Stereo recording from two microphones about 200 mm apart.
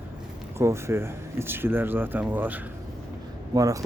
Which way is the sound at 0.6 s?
15° right (ahead or behind).